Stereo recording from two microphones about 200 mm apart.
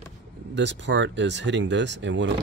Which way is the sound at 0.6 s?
65° right (ahead or behind).